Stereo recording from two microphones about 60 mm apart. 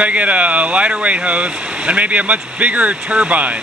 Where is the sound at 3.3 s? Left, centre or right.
Right.